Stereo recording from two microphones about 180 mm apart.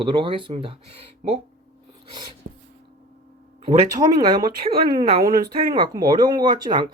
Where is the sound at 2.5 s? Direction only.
75° right (ahead or behind).